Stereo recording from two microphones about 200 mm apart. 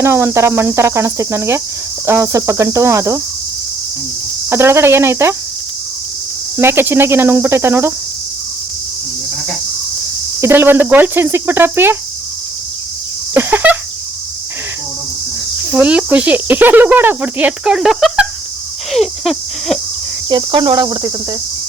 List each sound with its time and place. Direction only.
0.0 s speech: 15° right (ahead or behind)
4.4 s speech: 15° right (ahead or behind)
6.6 s speech: 10° right (ahead or behind)
10.4 s speech: 10° right (ahead or behind)
13.3 s speech: 10° right (ahead or behind)
15.7 s speech: 5° right (ahead or behind)
18.9 s a sound: centre (ahead or behind)
20.3 s cricket: 20° right (ahead or behind)